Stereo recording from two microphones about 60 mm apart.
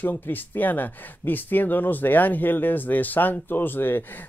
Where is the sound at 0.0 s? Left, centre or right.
Left.